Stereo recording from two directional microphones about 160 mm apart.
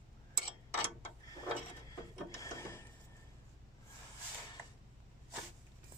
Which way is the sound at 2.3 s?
20° left (ahead or behind).